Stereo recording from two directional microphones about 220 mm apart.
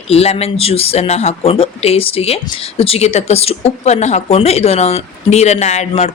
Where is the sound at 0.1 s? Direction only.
30° left (ahead or behind).